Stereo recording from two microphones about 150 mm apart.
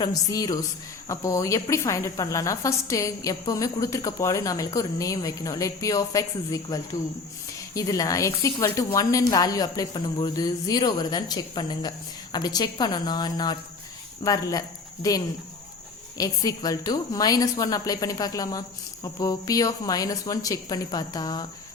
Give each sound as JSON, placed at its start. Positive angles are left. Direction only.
{"t": 0.0, "sound": "speech", "side_deg": 25}